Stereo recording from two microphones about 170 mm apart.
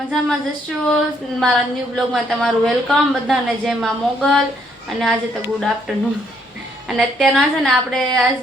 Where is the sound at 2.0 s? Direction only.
Centre (ahead or behind).